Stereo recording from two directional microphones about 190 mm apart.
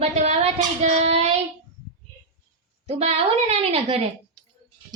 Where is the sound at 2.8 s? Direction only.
30° right (ahead or behind).